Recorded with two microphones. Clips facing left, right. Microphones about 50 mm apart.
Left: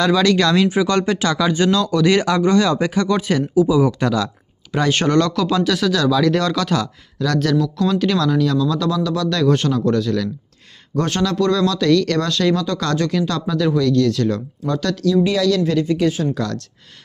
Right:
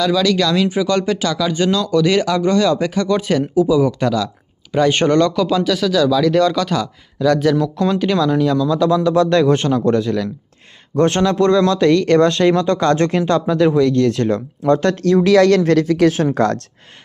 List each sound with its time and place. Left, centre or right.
0.0 s speech: centre
3.5 s speech: centre
4.9 s speech: centre
7.6 s speech: right
7.9 s speech: centre; by 15.1 s right
15.1 s speech: right
15.4 s speech: right
16.3 s speech: right